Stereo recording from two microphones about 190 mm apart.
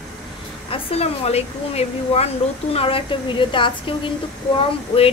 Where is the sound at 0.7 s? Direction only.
30° left (ahead or behind).